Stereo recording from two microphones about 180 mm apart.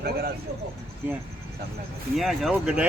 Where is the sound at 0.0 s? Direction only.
60° right (ahead or behind).